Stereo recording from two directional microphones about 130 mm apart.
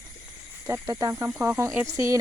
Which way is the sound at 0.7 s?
20° right (ahead or behind).